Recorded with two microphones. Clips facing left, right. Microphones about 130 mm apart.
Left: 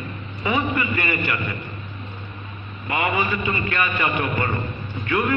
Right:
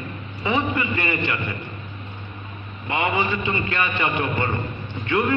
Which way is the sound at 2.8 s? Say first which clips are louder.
Even; 25° right (ahead or behind).